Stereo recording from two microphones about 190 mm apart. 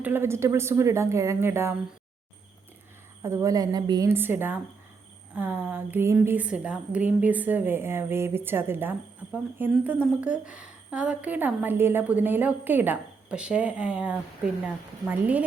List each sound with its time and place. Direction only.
0.0 s a woman's voice: 10° right (ahead or behind)
3.2 s a woman's voice: 15° right (ahead or behind)